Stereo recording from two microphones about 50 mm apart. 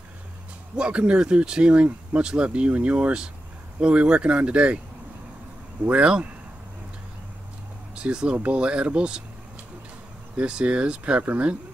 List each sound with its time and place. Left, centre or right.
0.7 s speech: right
5.9 s speech: right
7.9 s speech: centre
10.3 s speech: centre